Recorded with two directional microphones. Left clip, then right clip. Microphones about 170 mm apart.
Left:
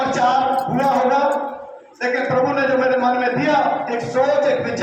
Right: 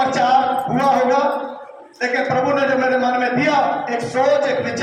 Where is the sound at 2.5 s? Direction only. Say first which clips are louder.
Even; 20° right (ahead or behind).